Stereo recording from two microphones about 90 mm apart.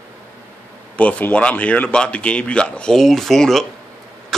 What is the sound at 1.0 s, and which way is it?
A man's voice, 15° left (ahead or behind).